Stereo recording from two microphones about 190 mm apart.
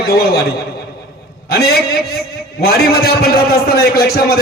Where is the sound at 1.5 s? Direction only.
55° left (ahead or behind).